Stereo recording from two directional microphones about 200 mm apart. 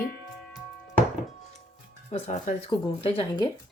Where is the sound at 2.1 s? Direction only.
35° left (ahead or behind).